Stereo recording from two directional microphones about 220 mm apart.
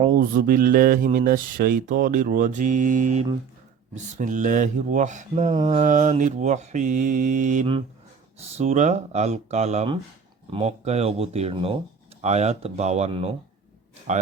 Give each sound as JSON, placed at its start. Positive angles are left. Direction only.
{"t": 0.2, "sound": "speech", "side_deg": -40}